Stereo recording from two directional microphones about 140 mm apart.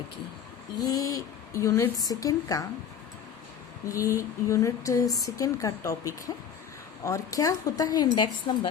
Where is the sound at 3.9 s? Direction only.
25° left (ahead or behind).